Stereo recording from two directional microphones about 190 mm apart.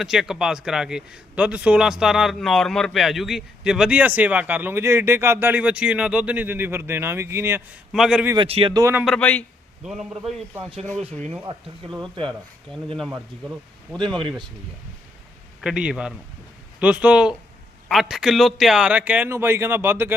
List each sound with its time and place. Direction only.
0.0 s a man's voice: 5° right (ahead or behind)
7.9 s a man's voice: 5° right (ahead or behind)
8.4 s speech: 30° right (ahead or behind)
8.8 s a man's voice: 10° right (ahead or behind)
9.0 s a man's voice: 5° left (ahead or behind)
11.2 s speech: 30° right (ahead or behind)
14.2 s speech: 25° right (ahead or behind)
15.6 s a man's voice: 5° right (ahead or behind)